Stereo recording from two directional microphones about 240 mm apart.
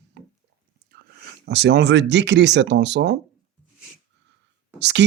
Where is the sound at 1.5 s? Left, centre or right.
Right.